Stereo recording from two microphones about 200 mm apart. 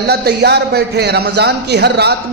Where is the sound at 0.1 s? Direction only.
55° right (ahead or behind).